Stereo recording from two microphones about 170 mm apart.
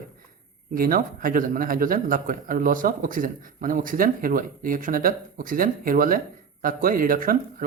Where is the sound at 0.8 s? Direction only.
55° right (ahead or behind).